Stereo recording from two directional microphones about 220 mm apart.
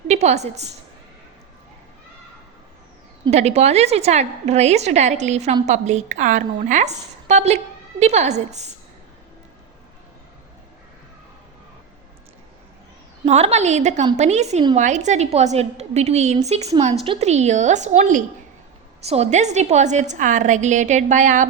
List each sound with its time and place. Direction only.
0.1 s a woman's voice: 30° right (ahead or behind)
3.2 s a woman's voice: 30° right (ahead or behind)
13.2 s a woman's voice: 30° right (ahead or behind)